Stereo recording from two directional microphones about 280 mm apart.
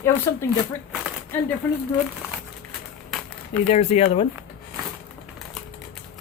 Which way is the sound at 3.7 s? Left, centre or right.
Left.